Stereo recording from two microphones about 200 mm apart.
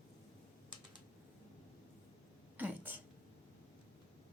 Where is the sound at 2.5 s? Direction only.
10° right (ahead or behind).